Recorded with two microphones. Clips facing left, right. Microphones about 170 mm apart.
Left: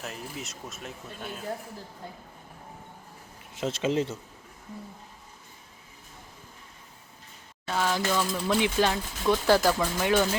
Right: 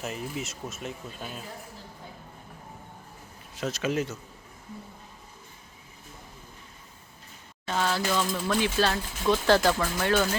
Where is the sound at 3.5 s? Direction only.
25° left (ahead or behind).